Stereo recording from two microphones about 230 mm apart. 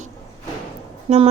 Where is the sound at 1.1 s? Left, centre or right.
Right.